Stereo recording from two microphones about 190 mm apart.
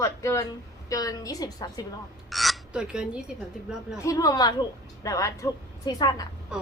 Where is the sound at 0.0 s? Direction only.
15° left (ahead or behind).